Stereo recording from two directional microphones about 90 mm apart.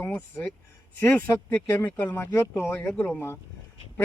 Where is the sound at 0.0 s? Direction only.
20° left (ahead or behind).